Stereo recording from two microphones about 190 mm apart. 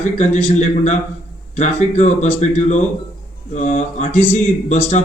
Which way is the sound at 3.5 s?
40° left (ahead or behind).